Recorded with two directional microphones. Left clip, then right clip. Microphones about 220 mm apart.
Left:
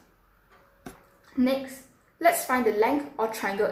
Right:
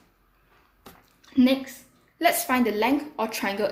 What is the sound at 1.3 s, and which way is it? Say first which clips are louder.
A woman's voice: right 4 dB; 45° right (ahead or behind).